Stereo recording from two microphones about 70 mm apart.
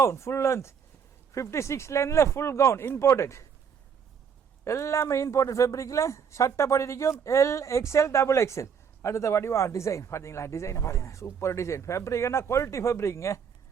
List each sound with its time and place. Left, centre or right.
0.0 s speech: left
4.6 s speech: left